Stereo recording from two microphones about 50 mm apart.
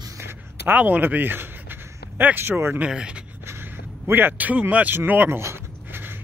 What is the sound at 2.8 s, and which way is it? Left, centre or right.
Speech, centre.